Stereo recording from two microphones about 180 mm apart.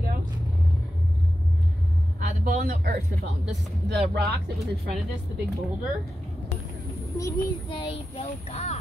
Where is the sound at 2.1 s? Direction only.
55° right (ahead or behind).